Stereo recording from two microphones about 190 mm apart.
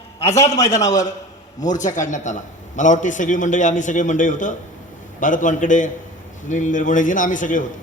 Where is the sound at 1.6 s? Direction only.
40° left (ahead or behind).